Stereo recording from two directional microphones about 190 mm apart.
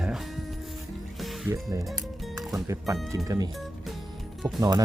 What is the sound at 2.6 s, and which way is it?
Speech, 15° right (ahead or behind).